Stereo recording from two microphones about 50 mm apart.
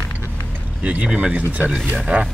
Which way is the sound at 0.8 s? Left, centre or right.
Right.